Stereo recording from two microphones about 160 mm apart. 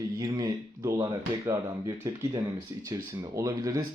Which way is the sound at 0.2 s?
25° right (ahead or behind).